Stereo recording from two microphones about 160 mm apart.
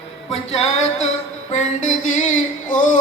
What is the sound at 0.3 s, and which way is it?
Music, 40° left (ahead or behind).